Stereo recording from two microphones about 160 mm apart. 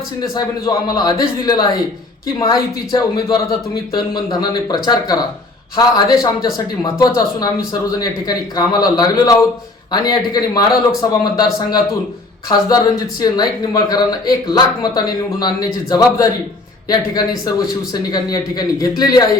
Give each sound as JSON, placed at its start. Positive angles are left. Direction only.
{"t": 0.2, "sound": "speech", "side_deg": 20}
{"t": 12.5, "sound": "speech", "side_deg": 25}